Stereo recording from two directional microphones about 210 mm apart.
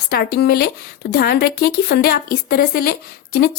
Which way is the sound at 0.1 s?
50° left (ahead or behind).